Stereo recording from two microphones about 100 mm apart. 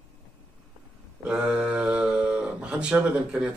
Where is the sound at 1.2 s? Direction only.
10° right (ahead or behind).